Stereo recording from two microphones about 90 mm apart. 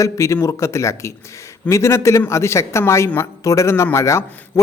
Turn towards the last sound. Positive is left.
turn(degrees=30)  # may be behind; listen again after turning